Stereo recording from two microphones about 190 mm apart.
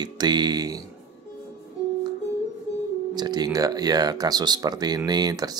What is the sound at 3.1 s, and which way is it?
Speech, 20° right (ahead or behind).